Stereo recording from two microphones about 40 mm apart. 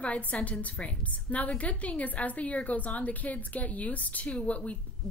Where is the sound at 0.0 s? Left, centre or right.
Left.